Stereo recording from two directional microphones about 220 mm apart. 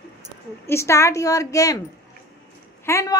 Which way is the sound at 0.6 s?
10° left (ahead or behind).